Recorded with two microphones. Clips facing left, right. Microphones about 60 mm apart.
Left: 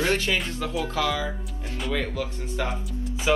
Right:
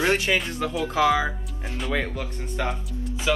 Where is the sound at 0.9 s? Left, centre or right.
Right.